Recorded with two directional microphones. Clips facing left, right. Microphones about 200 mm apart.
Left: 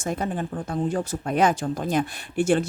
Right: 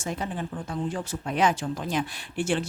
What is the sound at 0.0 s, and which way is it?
A woman's voice, 45° left (ahead or behind).